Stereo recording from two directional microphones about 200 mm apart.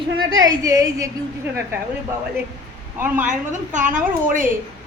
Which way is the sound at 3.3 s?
40° right (ahead or behind).